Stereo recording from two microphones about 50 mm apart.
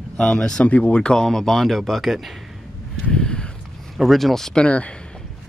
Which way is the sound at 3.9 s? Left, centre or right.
Centre.